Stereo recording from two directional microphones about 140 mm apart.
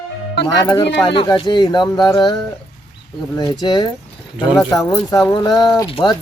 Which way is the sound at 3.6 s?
30° left (ahead or behind).